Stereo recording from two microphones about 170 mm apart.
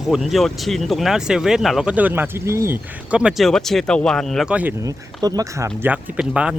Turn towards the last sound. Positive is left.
turn(degrees=-5)  # may be behind; listen again after turning